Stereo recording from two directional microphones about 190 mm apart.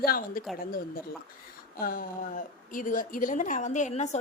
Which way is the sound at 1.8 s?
50° left (ahead or behind).